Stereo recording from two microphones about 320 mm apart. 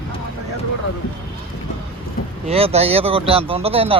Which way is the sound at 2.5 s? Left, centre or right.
Centre.